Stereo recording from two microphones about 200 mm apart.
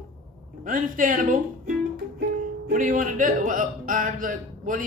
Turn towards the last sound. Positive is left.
turn(degrees=-40)  # may be behind; listen again after turning